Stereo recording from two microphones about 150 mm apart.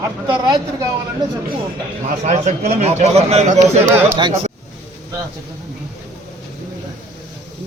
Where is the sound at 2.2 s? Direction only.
50° right (ahead or behind).